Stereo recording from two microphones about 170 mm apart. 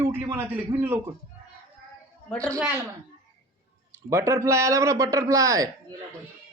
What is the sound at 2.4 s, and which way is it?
Speech, 20° right (ahead or behind).